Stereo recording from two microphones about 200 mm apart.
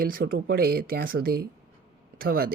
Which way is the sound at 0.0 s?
45° right (ahead or behind).